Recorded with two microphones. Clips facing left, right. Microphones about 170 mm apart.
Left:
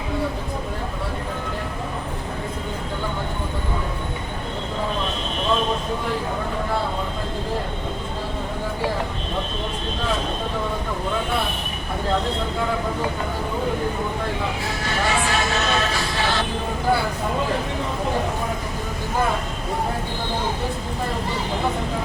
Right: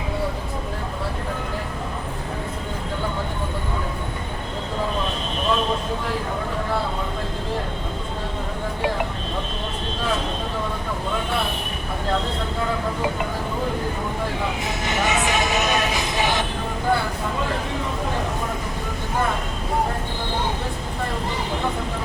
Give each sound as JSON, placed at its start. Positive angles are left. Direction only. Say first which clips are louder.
{"t": 14.6, "sound": "music", "louder": "right 1 dB", "side_deg": -20}